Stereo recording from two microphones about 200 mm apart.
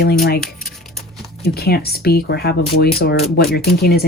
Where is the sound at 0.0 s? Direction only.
50° left (ahead or behind).